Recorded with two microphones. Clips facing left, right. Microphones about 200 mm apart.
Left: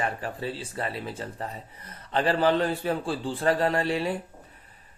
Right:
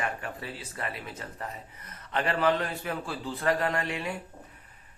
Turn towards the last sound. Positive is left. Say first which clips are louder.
# left 5 dB
turn(degrees=35)  # may be behind; listen again after turning